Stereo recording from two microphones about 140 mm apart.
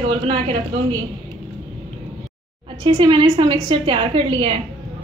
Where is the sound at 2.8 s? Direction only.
35° right (ahead or behind).